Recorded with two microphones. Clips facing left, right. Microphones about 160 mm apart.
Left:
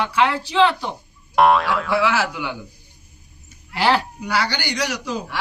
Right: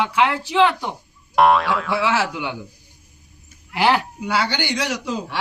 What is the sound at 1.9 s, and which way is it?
Speech, 20° right (ahead or behind).